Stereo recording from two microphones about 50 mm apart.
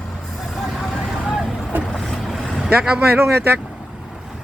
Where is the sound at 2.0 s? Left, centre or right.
Centre.